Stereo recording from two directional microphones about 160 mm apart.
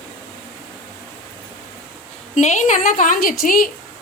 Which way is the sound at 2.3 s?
50° left (ahead or behind).